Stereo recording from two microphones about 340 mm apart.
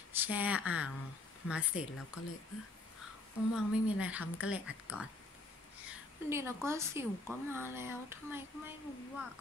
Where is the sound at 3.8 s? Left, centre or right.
Centre.